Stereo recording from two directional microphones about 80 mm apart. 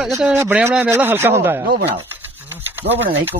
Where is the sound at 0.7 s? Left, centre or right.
Right.